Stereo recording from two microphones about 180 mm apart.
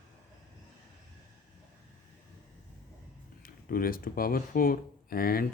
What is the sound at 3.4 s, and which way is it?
Speech, 55° left (ahead or behind).